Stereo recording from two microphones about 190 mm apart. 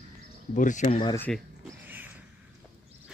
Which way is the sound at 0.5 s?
45° left (ahead or behind).